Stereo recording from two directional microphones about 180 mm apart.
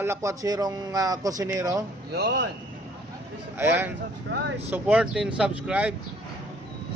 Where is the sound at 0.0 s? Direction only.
15° right (ahead or behind).